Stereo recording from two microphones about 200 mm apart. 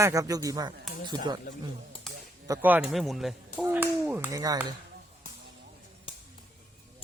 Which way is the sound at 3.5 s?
10° right (ahead or behind).